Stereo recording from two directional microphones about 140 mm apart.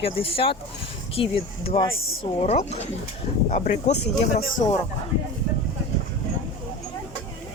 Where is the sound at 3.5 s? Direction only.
60° left (ahead or behind).